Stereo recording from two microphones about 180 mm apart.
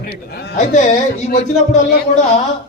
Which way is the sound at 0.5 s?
40° left (ahead or behind).